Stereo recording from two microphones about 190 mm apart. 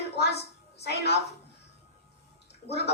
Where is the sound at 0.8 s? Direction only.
60° left (ahead or behind).